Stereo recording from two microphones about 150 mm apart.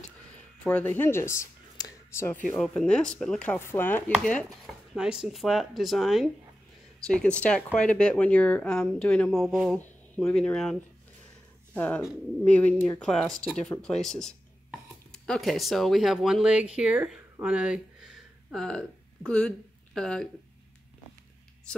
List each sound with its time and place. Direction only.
0.7 s speech: 10° left (ahead or behind)
2.5 s speech: 5° left (ahead or behind)